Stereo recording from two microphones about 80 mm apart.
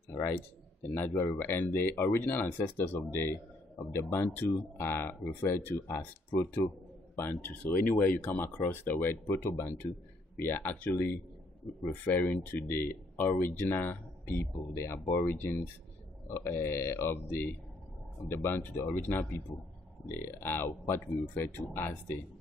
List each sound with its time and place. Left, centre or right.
0.9 s speech: left